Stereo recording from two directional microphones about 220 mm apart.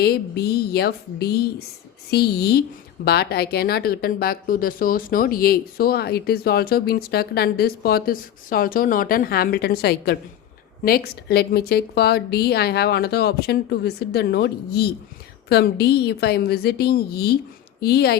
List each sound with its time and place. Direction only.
0.0 s a woman's voice: 45° left (ahead or behind)